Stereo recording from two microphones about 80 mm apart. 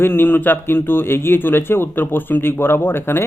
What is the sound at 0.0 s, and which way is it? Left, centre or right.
Speech, left.